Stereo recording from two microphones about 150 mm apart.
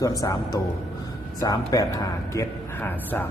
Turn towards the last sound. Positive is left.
turn(degrees=10)  # may be behind; listen again after turning